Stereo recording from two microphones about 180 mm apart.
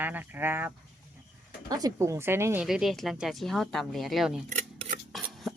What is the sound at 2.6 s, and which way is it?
Speech, centre (ahead or behind).